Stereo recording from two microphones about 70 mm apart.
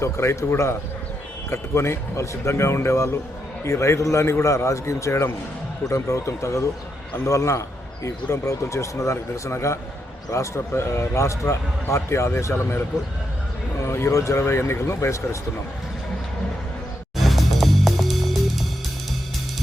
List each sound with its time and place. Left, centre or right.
0.0 s speech: left
12.5 s speech: left
17.2 s music: centre